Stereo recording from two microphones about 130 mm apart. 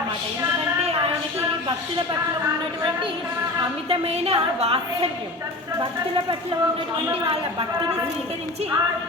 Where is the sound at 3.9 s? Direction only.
50° right (ahead or behind).